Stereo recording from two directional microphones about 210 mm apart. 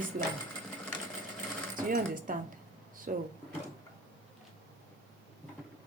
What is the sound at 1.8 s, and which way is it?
Speech, 40° right (ahead or behind).